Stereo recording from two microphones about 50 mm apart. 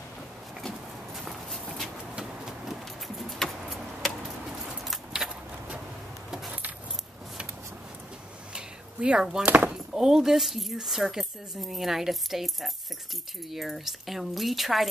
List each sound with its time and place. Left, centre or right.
1.1 s walk: centre
2.6 s vehicle: centre
8.5 s a sound: centre
9.8 s speech: centre